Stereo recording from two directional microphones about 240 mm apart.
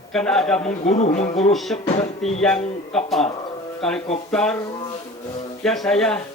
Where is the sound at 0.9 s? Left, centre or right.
Left.